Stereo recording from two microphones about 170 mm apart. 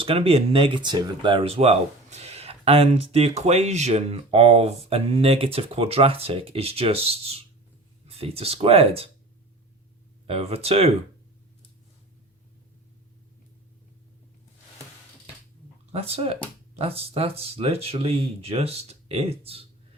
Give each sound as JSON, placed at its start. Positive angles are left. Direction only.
{"t": 0.0, "sound": "speech", "side_deg": -35}
{"t": 10.2, "sound": "speech", "side_deg": -35}
{"t": 15.9, "sound": "speech", "side_deg": -35}